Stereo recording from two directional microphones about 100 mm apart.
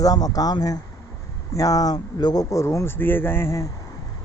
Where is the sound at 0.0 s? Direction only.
40° left (ahead or behind).